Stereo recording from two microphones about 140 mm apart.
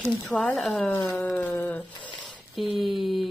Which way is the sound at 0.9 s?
15° left (ahead or behind).